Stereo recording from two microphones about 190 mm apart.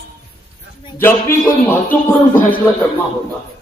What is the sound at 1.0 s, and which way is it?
Speech, 10° left (ahead or behind).